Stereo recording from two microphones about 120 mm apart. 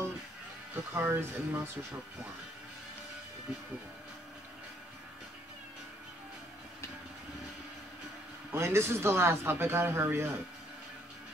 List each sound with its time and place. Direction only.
0.9 s speech: 20° right (ahead or behind)
8.5 s speech: 20° right (ahead or behind)